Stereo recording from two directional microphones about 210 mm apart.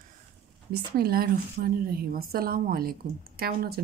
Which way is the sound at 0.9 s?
45° right (ahead or behind).